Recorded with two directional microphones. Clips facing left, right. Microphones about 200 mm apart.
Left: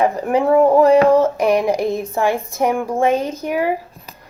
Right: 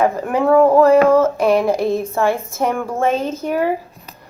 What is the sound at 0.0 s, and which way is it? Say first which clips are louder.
A woman's voice: even; 15° left (ahead or behind).